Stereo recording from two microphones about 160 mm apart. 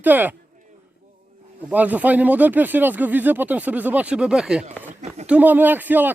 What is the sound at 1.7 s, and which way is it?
Speech, 10° right (ahead or behind).